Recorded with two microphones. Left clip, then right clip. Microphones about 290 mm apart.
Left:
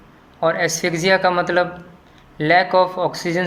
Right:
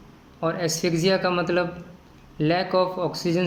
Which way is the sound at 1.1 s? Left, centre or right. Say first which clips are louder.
Left 6 dB; left.